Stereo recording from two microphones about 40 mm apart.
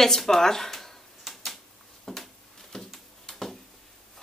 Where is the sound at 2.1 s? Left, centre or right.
Centre.